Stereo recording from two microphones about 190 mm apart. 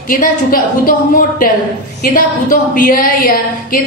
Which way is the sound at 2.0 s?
45° left (ahead or behind).